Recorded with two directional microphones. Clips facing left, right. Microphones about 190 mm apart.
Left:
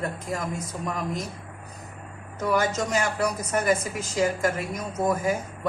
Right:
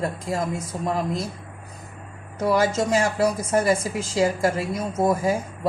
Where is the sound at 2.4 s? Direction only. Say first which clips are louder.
Right 4 dB; 30° right (ahead or behind).